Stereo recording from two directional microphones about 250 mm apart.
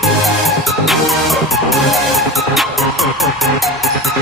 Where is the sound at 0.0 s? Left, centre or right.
Centre.